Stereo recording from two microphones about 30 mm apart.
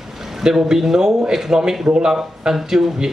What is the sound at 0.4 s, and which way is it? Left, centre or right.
Speech, right.